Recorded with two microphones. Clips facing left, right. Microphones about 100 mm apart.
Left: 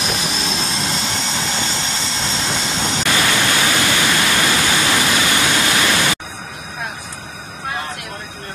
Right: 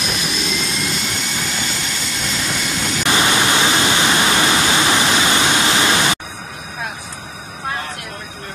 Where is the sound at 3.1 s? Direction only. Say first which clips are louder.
Right 3 dB; 20° right (ahead or behind).